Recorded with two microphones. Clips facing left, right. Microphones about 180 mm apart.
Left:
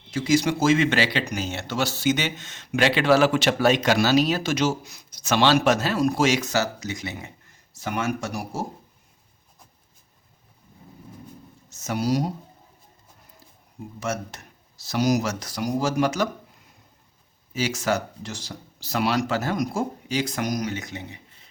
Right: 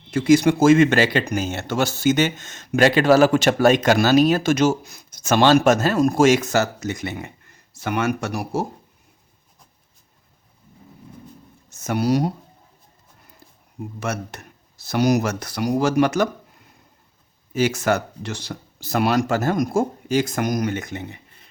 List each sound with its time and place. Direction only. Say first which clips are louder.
0.1 s speech: right 6 dB; 55° right (ahead or behind)
7.7 s speech: right 4 dB; 65° right (ahead or behind)
11.7 s speech: right 4 dB; 55° right (ahead or behind)
14.0 s speech: right 1 dB; 60° right (ahead or behind)
17.5 s speech: right 5 dB; 55° right (ahead or behind)